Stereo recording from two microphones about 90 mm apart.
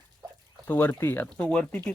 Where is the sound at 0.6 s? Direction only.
20° left (ahead or behind).